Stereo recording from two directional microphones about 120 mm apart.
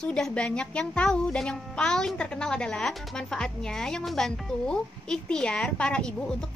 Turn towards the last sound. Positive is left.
turn(degrees=5)  # may be behind; listen again after turning